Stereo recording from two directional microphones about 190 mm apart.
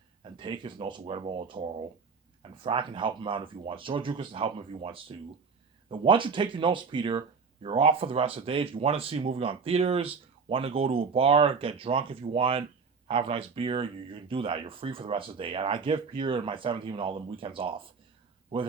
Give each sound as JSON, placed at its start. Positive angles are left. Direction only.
{"t": 0.3, "sound": "speech", "side_deg": -25}
{"t": 2.6, "sound": "speech", "side_deg": -25}